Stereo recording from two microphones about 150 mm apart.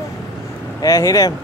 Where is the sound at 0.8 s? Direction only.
20° left (ahead or behind).